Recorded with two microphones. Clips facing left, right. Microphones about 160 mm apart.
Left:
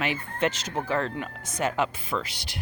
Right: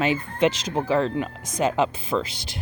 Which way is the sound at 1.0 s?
20° right (ahead or behind).